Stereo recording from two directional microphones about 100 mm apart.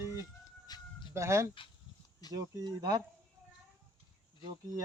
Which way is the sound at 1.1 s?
30° right (ahead or behind).